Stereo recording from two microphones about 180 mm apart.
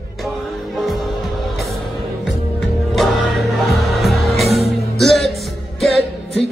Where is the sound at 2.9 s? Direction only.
Centre (ahead or behind).